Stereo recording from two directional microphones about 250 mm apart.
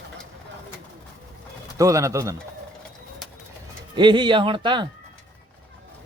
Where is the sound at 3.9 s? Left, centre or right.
Centre.